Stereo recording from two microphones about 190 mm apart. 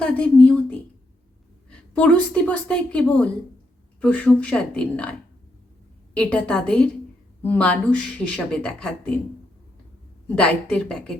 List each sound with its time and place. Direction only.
0.0 s a sound: 5° left (ahead or behind)
1.9 s a woman's voice: 5° left (ahead or behind)
6.1 s speech: 5° left (ahead or behind)
10.2 s speech: 5° left (ahead or behind)